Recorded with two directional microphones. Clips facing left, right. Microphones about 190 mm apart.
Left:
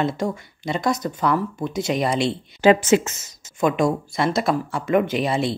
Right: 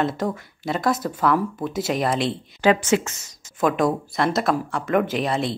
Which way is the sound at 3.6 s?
Centre (ahead or behind).